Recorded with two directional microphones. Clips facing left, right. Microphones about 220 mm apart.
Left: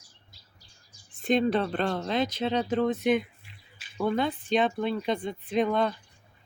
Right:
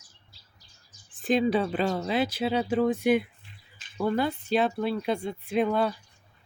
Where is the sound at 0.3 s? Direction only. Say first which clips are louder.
Left 1 dB; 30° right (ahead or behind).